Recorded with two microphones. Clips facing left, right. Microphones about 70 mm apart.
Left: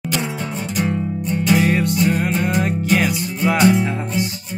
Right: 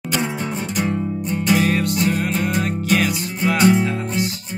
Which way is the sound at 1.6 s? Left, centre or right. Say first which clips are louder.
Left 2 dB; centre.